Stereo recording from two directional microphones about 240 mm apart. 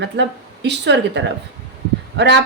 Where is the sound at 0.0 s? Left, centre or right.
Right.